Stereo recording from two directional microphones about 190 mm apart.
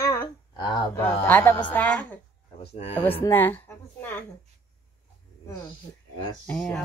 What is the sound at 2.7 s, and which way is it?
Speech, 30° left (ahead or behind).